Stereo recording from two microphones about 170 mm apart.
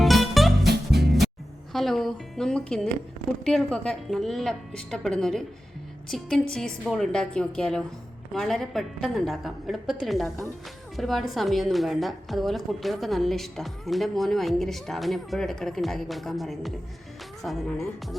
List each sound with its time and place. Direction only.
0.0 s music: centre (ahead or behind)
0.7 s music: 70° right (ahead or behind)
1.7 s a woman's voice: centre (ahead or behind)